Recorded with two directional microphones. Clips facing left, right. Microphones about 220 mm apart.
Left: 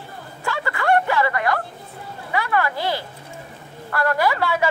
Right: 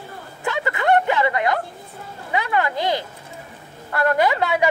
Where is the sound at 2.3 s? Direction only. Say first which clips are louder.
Right 1 dB; 20° right (ahead or behind).